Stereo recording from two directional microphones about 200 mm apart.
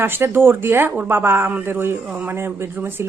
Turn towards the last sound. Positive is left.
turn(degrees=-10)  # may be behind; listen again after turning